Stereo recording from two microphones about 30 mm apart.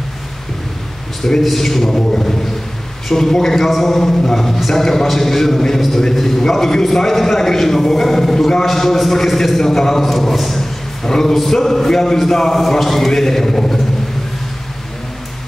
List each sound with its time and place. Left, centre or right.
1.2 s a man's voice: centre
3.1 s a man's voice: centre
9.6 s a man's voice: centre
11.1 s a man's voice: centre